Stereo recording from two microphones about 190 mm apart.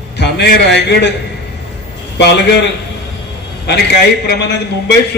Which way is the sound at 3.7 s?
60° left (ahead or behind).